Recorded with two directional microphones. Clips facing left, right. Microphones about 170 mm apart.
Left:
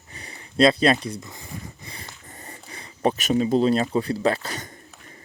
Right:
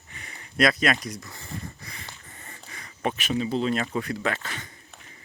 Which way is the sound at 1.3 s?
20° left (ahead or behind).